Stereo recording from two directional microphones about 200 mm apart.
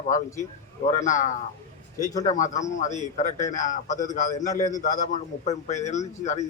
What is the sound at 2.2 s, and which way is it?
A man's voice, 40° left (ahead or behind).